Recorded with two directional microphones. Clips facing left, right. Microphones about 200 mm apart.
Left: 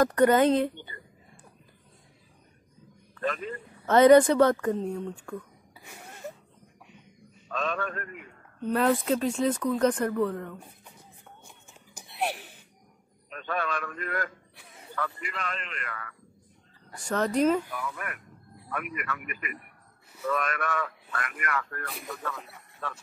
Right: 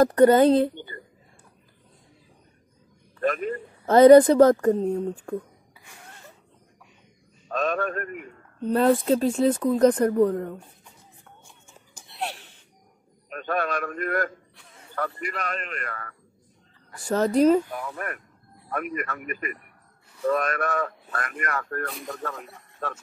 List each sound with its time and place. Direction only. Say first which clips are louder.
0.0 s speech: right 5 dB; 30° right (ahead or behind)
3.2 s a man's voice: right 6 dB; 50° right (ahead or behind)
3.8 s speech: right 5 dB; 35° right (ahead or behind)
7.4 s a man's voice: right 5 dB; 45° right (ahead or behind)
8.6 s speech: right 5 dB; 30° right (ahead or behind)
12.1 s gasp: left 2 dB; 10° left (ahead or behind)
13.3 s a man's voice: right 5 dB; 50° right (ahead or behind)